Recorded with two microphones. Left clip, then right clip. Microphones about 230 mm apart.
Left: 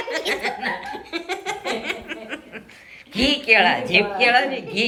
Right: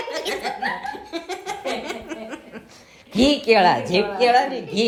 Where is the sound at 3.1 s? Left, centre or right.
Right.